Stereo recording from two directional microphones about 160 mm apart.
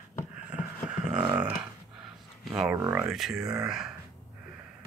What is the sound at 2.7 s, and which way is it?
Speech, 15° right (ahead or behind).